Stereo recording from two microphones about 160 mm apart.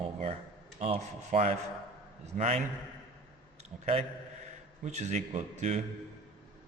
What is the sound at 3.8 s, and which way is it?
A man's voice, 40° right (ahead or behind).